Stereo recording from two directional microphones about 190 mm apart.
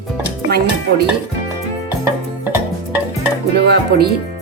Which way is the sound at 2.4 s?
10° right (ahead or behind).